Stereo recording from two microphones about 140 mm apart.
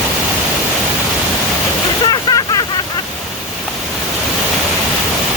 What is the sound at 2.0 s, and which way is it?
Waterfall, 30° left (ahead or behind).